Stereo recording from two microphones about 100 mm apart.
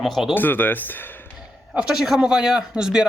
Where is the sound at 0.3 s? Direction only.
20° left (ahead or behind).